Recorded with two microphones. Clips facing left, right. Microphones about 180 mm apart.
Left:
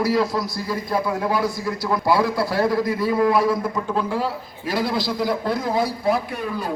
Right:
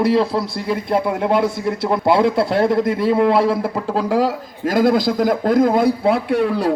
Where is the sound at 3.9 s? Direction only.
40° right (ahead or behind).